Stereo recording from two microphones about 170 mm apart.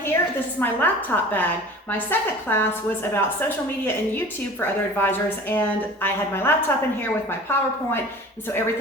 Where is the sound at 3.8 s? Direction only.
15° left (ahead or behind).